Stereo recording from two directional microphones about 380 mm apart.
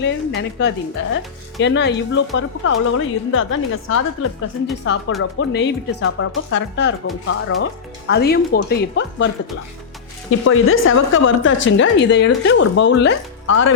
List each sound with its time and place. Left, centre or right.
0.0 s speech: left
10.4 s speech: left